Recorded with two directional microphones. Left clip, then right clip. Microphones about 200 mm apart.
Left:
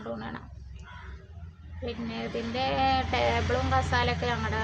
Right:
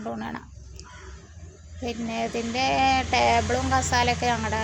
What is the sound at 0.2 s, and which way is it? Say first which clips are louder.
Speech: right 5 dB; 25° right (ahead or behind).